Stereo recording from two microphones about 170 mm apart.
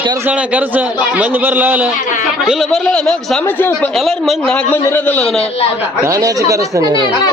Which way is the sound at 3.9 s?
Centre (ahead or behind).